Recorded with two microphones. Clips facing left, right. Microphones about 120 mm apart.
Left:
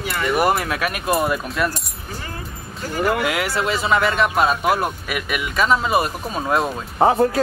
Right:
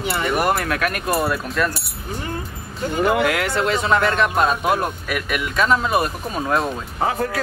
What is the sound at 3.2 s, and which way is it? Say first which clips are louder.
Speech: right 2 dB; 5° left (ahead or behind).